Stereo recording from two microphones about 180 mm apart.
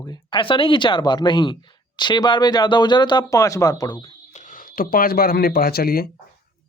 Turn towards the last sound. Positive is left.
turn(degrees=55)  # may be behind; listen again after turning